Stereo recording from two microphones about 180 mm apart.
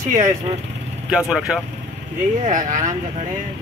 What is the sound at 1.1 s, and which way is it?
Speech, 5° right (ahead or behind).